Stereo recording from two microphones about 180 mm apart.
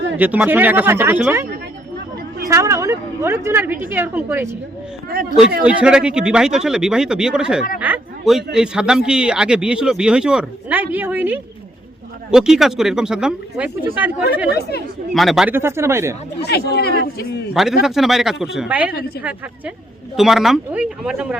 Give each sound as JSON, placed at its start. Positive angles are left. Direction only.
{"t": 0.2, "sound": "speech", "side_deg": -10}
{"t": 2.5, "sound": "speech", "side_deg": -15}
{"t": 5.6, "sound": "a man's voice", "side_deg": -5}
{"t": 15.5, "sound": "speech", "side_deg": -15}
{"t": 16.4, "sound": "speech", "side_deg": 65}
{"t": 17.5, "sound": "a man's voice", "side_deg": 0}
{"t": 18.9, "sound": "speech", "side_deg": 55}
{"t": 20.1, "sound": "a man's voice", "side_deg": 0}